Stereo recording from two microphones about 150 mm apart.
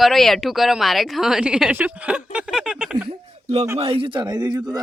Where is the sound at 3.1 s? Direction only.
45° right (ahead or behind).